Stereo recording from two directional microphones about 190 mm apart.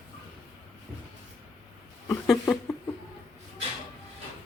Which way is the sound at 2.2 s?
Centre (ahead or behind).